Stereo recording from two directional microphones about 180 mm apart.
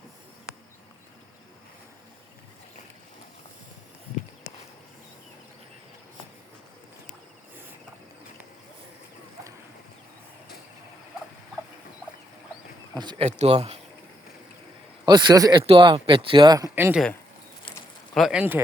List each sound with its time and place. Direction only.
12.9 s speech: 25° right (ahead or behind)
13.2 s speech: 35° right (ahead or behind)
15.0 s speech: 25° right (ahead or behind)
18.1 s speech: centre (ahead or behind)